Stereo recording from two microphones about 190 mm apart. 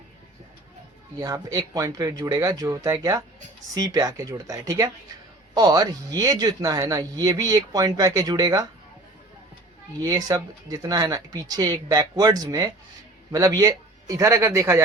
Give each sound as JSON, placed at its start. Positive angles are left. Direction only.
{"t": 1.2, "sound": "a man's voice", "side_deg": -20}
{"t": 10.0, "sound": "a man's voice", "side_deg": -20}